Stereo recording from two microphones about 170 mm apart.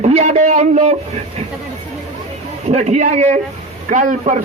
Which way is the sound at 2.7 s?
45° right (ahead or behind).